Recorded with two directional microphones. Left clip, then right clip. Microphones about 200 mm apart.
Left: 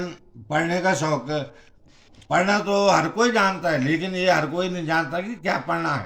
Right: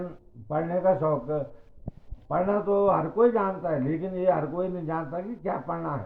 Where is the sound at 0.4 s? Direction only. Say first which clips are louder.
Left 3 dB; 15° left (ahead or behind).